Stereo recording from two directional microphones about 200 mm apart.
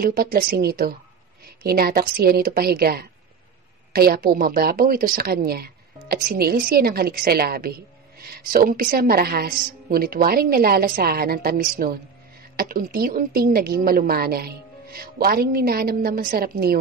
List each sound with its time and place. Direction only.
0.0 s a woman's voice: 45° right (ahead or behind)